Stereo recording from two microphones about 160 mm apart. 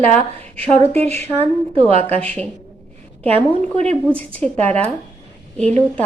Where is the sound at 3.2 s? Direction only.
40° right (ahead or behind).